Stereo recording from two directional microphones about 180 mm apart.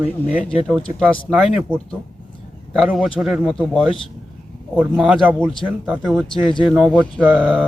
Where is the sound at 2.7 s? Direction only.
5° right (ahead or behind).